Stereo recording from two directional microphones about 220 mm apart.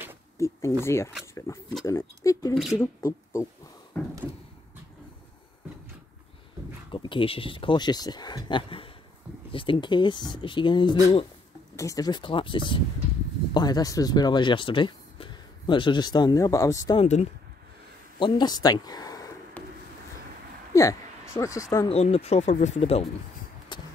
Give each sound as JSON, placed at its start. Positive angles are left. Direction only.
{"t": 0.4, "sound": "speech", "side_deg": 15}
{"t": 2.5, "sound": "speech", "side_deg": 0}
{"t": 2.8, "sound": "speech", "side_deg": 15}
{"t": 6.9, "sound": "speech", "side_deg": 25}
{"t": 17.0, "sound": "speech", "side_deg": 30}
{"t": 18.2, "sound": "a sound", "side_deg": 20}
{"t": 20.7, "sound": "speech", "side_deg": 15}
{"t": 21.8, "sound": "speech", "side_deg": 25}
{"t": 23.7, "sound": "a sound", "side_deg": 20}